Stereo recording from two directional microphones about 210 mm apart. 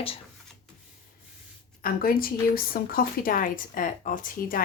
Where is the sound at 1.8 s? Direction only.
45° left (ahead or behind).